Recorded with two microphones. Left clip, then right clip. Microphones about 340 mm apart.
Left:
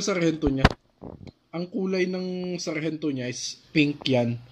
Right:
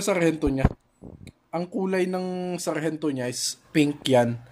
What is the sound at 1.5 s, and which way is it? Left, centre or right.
Speech, right.